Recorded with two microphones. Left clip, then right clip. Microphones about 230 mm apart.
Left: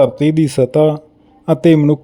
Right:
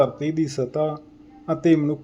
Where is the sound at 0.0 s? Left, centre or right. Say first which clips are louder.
Left 9 dB; left.